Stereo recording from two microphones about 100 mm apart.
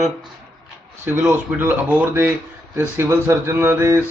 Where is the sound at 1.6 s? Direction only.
20° right (ahead or behind).